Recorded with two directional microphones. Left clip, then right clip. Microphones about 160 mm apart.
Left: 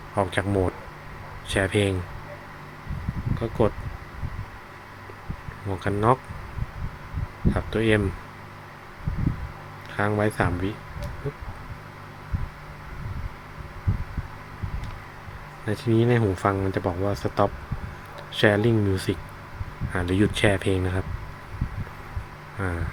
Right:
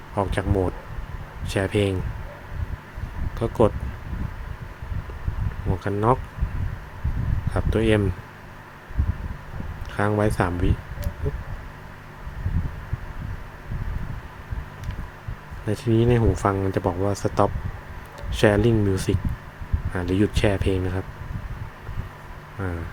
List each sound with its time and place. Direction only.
0.2 s speech: 15° right (ahead or behind)
3.4 s speech: 30° right (ahead or behind)
5.8 s speech: 15° right (ahead or behind)
7.5 s speech: 25° right (ahead or behind)
9.9 s speech: 20° right (ahead or behind)
15.6 s speech: 20° right (ahead or behind)
22.6 s speech: 15° right (ahead or behind)